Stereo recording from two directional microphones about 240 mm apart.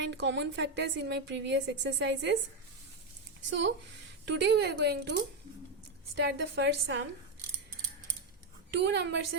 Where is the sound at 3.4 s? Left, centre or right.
Right.